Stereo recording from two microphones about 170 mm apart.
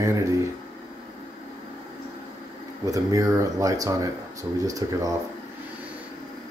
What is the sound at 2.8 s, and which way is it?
Speech, 20° right (ahead or behind).